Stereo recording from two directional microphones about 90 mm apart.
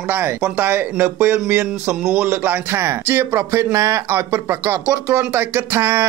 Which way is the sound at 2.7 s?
25° right (ahead or behind).